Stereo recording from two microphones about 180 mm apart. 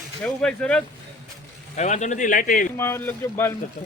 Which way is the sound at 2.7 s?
15° left (ahead or behind).